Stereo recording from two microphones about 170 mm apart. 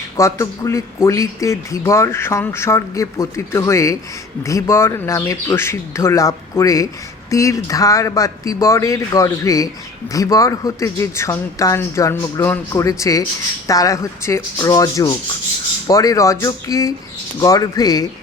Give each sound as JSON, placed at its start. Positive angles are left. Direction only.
{"t": 0.2, "sound": "a man's voice", "side_deg": 20}